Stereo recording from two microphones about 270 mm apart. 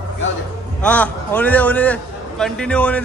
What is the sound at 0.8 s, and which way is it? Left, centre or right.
A man's voice, centre.